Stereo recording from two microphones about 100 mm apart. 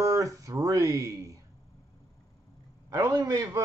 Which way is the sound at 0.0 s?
35° right (ahead or behind).